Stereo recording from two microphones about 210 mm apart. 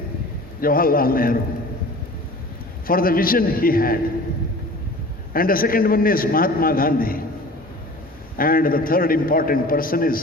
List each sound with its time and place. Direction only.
0.6 s a man's voice: 45° left (ahead or behind)
2.8 s a man's voice: 45° left (ahead or behind)
5.3 s a man's voice: 45° left (ahead or behind)
8.4 s a man's voice: 45° left (ahead or behind)